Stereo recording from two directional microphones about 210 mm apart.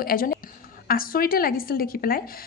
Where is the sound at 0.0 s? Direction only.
45° left (ahead or behind).